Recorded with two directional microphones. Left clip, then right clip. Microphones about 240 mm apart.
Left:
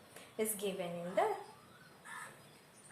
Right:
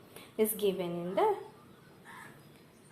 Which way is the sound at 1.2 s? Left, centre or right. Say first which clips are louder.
Right 5 dB; right.